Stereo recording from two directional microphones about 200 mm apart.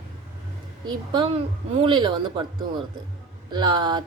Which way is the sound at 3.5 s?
20° right (ahead or behind).